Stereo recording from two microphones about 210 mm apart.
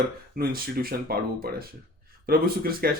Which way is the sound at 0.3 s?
45° right (ahead or behind).